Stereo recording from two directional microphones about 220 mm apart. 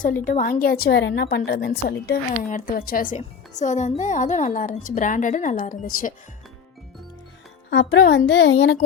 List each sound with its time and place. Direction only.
0.3 s a woman's voice: 35° left (ahead or behind)
7.7 s speech: 55° left (ahead or behind)